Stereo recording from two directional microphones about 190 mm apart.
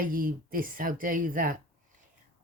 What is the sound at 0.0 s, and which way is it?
Speech, 45° right (ahead or behind).